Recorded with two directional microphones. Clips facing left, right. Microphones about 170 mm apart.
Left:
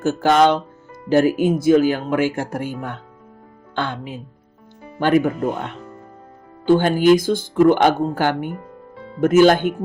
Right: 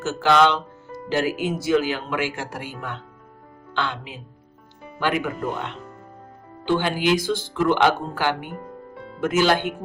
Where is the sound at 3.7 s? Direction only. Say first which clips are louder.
Left 3 dB; 50° left (ahead or behind).